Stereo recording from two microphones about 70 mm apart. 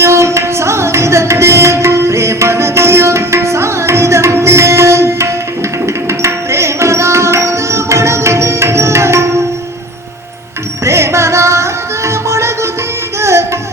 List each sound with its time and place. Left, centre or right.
0.0 s music: right
10.8 s music: right